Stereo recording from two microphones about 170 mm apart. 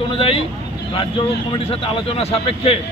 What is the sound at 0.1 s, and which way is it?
Speech, 35° left (ahead or behind).